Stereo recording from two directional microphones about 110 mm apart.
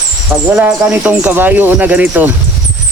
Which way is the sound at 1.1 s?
15° right (ahead or behind).